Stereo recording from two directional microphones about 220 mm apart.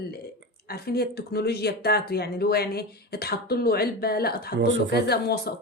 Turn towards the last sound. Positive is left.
turn(degrees=45)  # may be behind; listen again after turning